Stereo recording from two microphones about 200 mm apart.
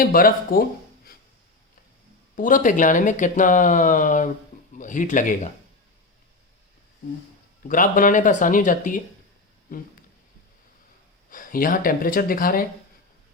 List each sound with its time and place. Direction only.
0.0 s speech: 45° left (ahead or behind)
2.3 s speech: 40° left (ahead or behind)
7.7 s speech: 40° left (ahead or behind)
11.3 s speech: 45° left (ahead or behind)